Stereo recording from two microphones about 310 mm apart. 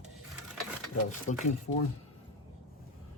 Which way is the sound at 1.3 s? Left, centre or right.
Left.